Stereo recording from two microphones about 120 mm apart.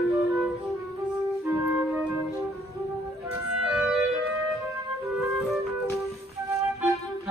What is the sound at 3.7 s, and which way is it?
Music, centre (ahead or behind).